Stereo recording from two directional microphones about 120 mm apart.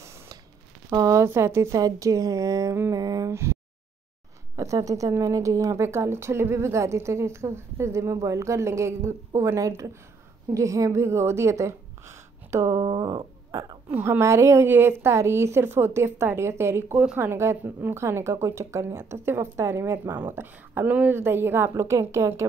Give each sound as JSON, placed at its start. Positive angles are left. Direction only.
{"t": 0.0, "sound": "a sound", "side_deg": -25}
{"t": 0.8, "sound": "a woman's voice", "side_deg": -25}
{"t": 4.6, "sound": "a woman's voice", "side_deg": -25}
{"t": 12.8, "sound": "speech", "side_deg": -40}
{"t": 13.8, "sound": "a woman's voice", "side_deg": -15}